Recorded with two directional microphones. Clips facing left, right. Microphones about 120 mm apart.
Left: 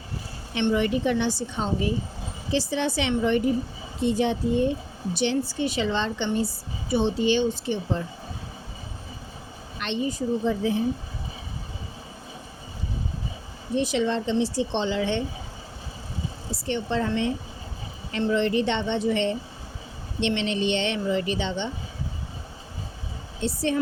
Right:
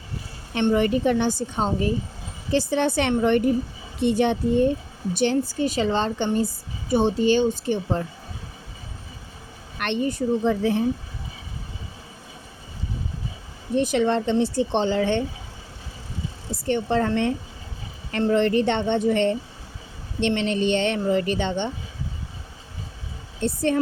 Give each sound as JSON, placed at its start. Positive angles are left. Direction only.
{"t": 0.5, "sound": "a woman's voice", "side_deg": -45}
{"t": 9.7, "sound": "a woman's voice", "side_deg": -55}
{"t": 13.7, "sound": "a woman's voice", "side_deg": -50}
{"t": 16.5, "sound": "a woman's voice", "side_deg": -50}
{"t": 23.4, "sound": "a woman's voice", "side_deg": -50}